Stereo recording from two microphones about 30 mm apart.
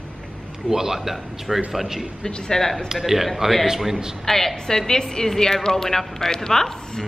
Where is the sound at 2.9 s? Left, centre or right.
Centre.